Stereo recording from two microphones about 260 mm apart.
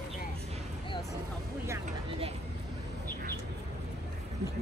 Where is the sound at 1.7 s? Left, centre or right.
Right.